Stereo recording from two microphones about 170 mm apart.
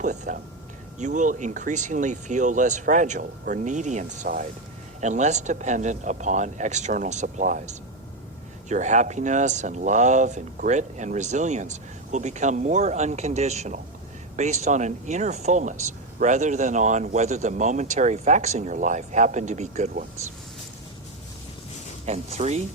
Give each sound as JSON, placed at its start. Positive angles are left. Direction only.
{"t": 0.0, "sound": "speech", "side_deg": -50}
{"t": 22.0, "sound": "speech", "side_deg": -40}